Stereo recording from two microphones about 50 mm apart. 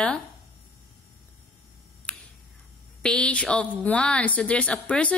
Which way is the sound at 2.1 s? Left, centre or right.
Left.